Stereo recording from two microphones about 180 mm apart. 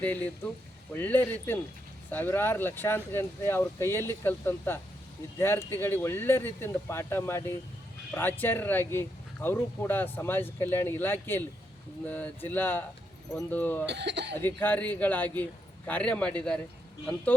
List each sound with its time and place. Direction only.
0.0 s speech: 10° left (ahead or behind)
13.8 s speech: 70° right (ahead or behind)
14.3 s speech: 10° left (ahead or behind)